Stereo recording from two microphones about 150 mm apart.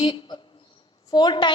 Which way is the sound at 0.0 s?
25° left (ahead or behind).